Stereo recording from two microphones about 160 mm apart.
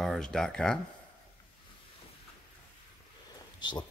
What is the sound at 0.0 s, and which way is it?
Speech, 5° left (ahead or behind).